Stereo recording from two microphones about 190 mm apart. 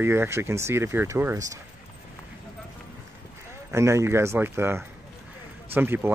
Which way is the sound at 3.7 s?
15° right (ahead or behind).